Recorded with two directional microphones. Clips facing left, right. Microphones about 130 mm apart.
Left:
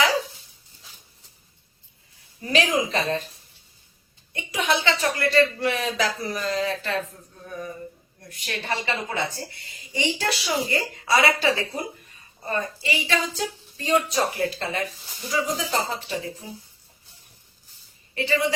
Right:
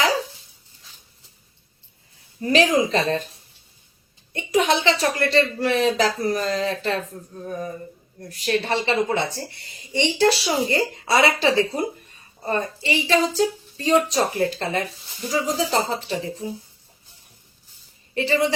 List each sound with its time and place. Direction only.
2.4 s speech: 35° right (ahead or behind)
4.3 s speech: 35° right (ahead or behind)
18.1 s speech: 35° right (ahead or behind)